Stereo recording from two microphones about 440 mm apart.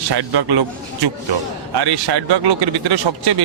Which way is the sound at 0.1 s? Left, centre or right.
Right.